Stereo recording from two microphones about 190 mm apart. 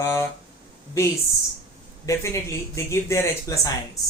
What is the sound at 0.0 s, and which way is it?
Speech, 15° left (ahead or behind).